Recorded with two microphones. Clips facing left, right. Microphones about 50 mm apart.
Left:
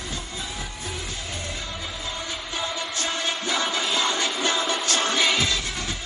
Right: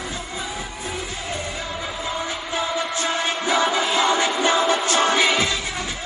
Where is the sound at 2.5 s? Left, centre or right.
Centre.